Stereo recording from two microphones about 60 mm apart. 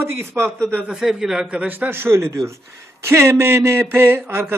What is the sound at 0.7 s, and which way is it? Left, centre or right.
Speech, centre.